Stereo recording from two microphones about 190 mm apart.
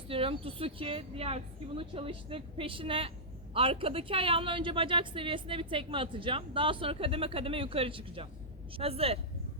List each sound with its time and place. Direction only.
0.1 s a woman's voice: 30° right (ahead or behind)